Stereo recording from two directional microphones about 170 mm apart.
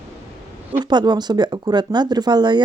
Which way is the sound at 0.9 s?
25° right (ahead or behind).